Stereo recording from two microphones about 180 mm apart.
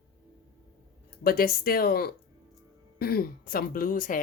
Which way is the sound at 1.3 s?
55° left (ahead or behind).